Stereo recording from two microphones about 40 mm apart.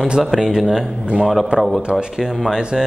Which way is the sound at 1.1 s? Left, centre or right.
Centre.